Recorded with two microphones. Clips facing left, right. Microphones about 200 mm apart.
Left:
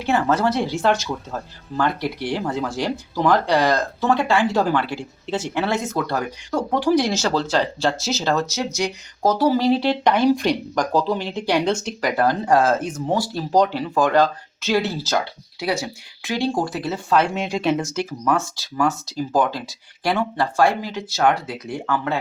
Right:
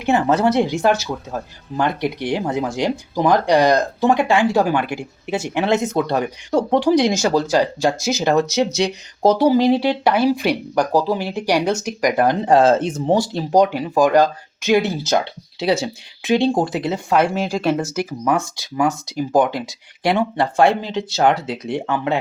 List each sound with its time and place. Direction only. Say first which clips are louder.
0.0 s speech: right 3 dB; 20° right (ahead or behind)
17.3 s speech: right 2 dB; centre (ahead or behind)
17.9 s speech: right 2 dB; 10° right (ahead or behind)